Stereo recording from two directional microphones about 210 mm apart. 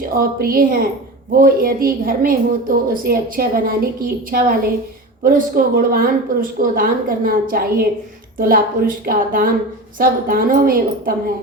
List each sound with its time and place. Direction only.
0.2 s a woman's voice: 45° right (ahead or behind)